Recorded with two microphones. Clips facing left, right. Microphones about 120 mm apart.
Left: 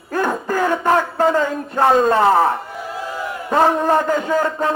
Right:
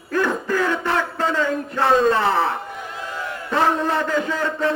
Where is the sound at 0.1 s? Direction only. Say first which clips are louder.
Left 1 dB; 40° left (ahead or behind).